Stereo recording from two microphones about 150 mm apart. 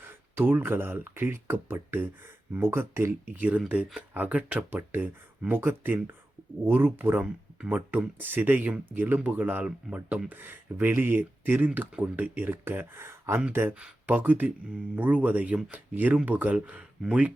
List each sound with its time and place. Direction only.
0.0 s speech: 15° right (ahead or behind)